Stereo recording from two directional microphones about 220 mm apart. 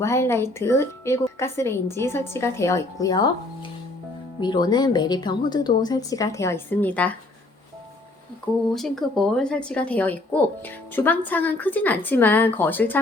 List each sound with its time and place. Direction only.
0.0 s a woman's voice: 10° left (ahead or behind)
4.4 s speech: 20° left (ahead or behind)
8.7 s a woman's voice: centre (ahead or behind)